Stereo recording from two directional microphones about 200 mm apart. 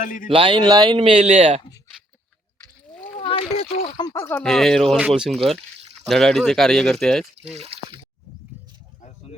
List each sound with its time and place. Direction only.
0.0 s speech: 40° left (ahead or behind)
0.3 s a man's voice: 25° right (ahead or behind)
3.2 s a sound: 25° left (ahead or behind)
3.6 s speech: 30° left (ahead or behind); by 7.5 s centre (ahead or behind)
7.5 s drip: 30° right (ahead or behind)